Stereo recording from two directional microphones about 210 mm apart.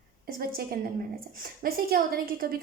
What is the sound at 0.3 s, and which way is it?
A woman's voice, 45° right (ahead or behind).